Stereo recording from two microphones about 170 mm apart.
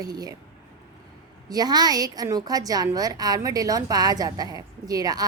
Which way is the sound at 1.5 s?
25° right (ahead or behind).